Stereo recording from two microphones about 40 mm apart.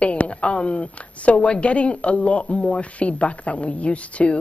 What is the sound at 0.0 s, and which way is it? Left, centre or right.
A woman's voice, left.